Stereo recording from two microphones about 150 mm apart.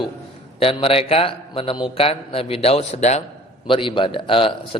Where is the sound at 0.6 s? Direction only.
35° left (ahead or behind).